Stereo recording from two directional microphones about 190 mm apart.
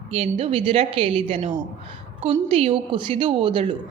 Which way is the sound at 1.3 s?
40° right (ahead or behind).